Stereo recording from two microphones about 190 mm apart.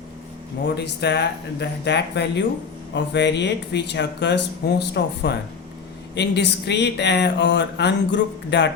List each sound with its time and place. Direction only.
0.8 s speech: 60° left (ahead or behind)